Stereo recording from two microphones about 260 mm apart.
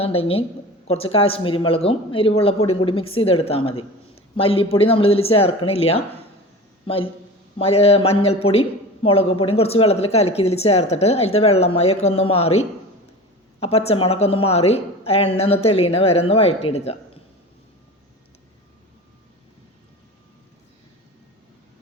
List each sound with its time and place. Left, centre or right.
0.0 s a woman's voice: left